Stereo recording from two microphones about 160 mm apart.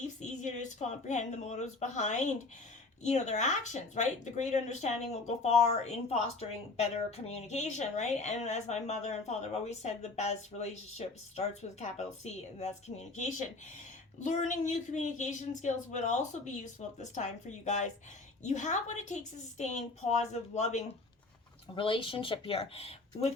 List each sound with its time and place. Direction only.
0.0 s a woman's voice: 50° left (ahead or behind)
21.8 s speech: 30° left (ahead or behind)